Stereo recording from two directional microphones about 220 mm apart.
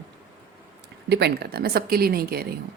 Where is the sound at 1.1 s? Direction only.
50° right (ahead or behind).